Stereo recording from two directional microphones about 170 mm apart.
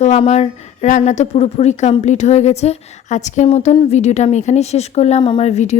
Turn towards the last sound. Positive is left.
turn(degrees=40)  # may be behind; listen again after turning